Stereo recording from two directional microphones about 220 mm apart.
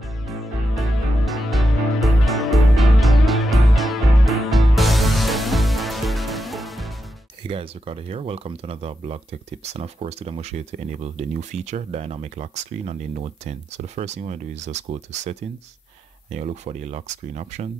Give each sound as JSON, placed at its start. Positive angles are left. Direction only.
{"t": 0.3, "sound": "music", "side_deg": 0}
{"t": 7.4, "sound": "speech", "side_deg": -25}
{"t": 16.3, "sound": "speech", "side_deg": -30}